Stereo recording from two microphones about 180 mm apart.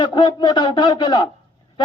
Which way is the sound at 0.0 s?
25° left (ahead or behind).